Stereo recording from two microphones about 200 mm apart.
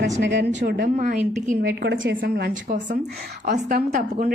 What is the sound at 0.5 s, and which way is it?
A woman's voice, 45° right (ahead or behind).